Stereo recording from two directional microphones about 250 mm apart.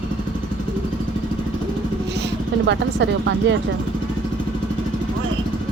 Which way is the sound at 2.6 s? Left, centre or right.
Right.